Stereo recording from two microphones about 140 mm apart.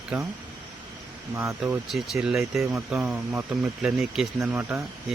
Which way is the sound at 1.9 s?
Centre (ahead or behind).